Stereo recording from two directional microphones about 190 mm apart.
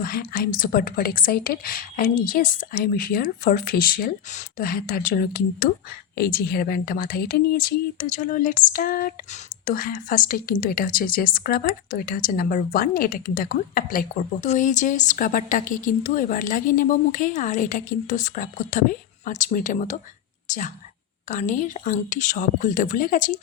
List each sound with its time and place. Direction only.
0.0 s a woman's voice: 50° left (ahead or behind)